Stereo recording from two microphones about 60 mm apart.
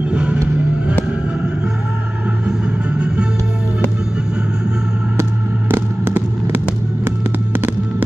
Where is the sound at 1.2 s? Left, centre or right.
Centre.